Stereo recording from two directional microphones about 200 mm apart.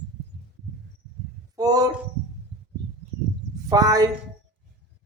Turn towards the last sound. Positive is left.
turn(degrees=-20)  # may be behind; listen again after turning